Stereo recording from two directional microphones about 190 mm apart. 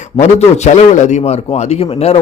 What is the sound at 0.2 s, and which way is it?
A man's voice, 35° left (ahead or behind).